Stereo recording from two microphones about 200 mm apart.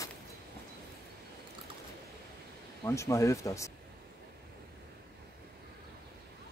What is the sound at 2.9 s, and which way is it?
Speech, 15° left (ahead or behind).